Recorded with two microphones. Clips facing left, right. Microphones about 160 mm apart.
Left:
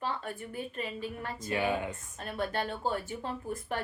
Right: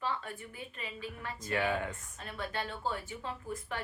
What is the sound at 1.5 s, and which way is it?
Speech, 5° left (ahead or behind).